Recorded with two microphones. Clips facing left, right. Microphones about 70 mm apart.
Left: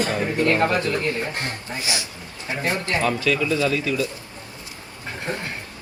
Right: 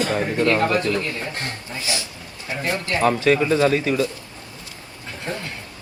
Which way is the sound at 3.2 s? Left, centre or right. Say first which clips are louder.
Right 4 dB; right.